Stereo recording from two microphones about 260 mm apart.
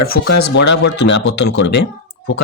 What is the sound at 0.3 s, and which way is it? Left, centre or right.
Speech, left.